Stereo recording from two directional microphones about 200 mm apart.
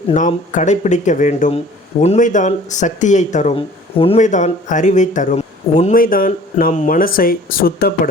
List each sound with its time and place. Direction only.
0.1 s speech: 35° left (ahead or behind)